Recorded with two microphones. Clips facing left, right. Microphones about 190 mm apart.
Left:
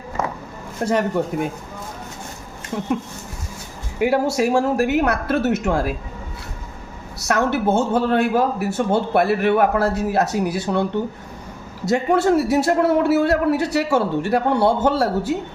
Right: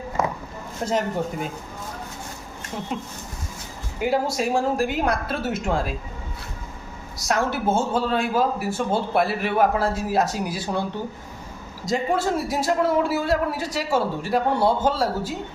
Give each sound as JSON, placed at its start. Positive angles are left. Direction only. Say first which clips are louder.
{"t": 0.9, "sound": "a man's voice", "louder": "left 4 dB", "side_deg": 60}
{"t": 4.0, "sound": "speech", "louder": "left 5 dB", "side_deg": 65}
{"t": 7.2, "sound": "a man's voice", "louder": "left 4 dB", "side_deg": 65}
{"t": 11.9, "sound": "a man's voice", "louder": "left 6 dB", "side_deg": 65}